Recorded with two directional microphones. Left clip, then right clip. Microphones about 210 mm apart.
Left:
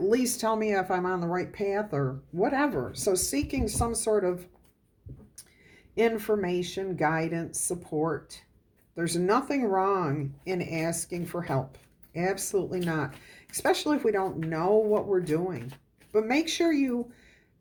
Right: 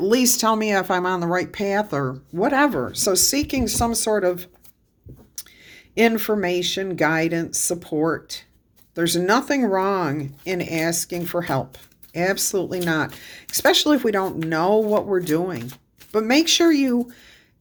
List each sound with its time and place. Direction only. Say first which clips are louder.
0.0 s speech: right 7 dB; 30° right (ahead or behind)